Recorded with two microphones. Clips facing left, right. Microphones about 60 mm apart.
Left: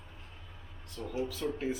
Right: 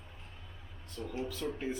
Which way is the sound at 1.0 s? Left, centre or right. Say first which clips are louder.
Left 1 dB; centre.